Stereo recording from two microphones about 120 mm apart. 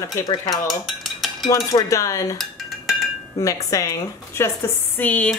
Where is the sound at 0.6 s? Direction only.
Centre (ahead or behind).